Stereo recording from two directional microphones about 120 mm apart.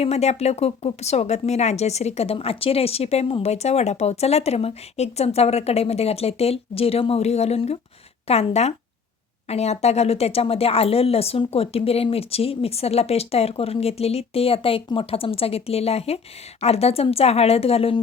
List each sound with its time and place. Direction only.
0.0 s speech: 60° left (ahead or behind)